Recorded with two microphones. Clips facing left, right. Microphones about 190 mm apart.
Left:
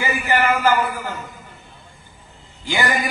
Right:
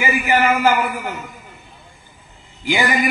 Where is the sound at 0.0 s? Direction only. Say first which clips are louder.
Right 2 dB; 15° right (ahead or behind).